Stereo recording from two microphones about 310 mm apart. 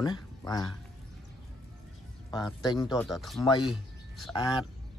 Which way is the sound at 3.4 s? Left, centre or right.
Centre.